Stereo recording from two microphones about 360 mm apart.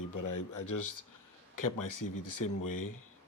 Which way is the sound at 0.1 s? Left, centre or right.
Left.